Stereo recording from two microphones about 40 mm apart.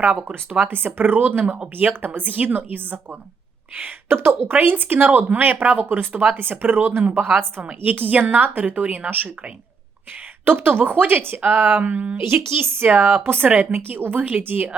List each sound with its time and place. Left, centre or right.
0.6 s a woman's voice: right
4.1 s speech: right
4.5 s a woman's voice: right
5.8 s a woman's voice: right
10.4 s speech: right
12.1 s a woman's voice: right
12.9 s a woman's voice: right